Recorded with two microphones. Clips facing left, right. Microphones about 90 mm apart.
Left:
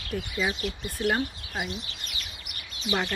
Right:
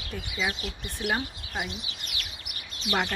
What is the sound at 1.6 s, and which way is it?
Speech, 10° right (ahead or behind).